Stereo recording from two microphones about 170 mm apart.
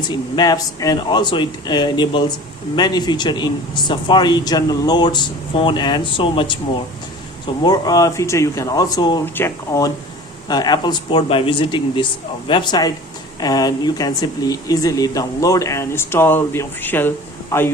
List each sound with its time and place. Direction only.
0.1 s speech: 25° left (ahead or behind)
9.2 s speech: 15° left (ahead or behind)